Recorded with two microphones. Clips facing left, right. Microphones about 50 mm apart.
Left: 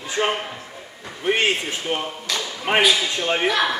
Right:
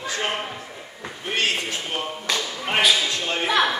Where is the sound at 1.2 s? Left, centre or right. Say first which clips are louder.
Left 4 dB; left.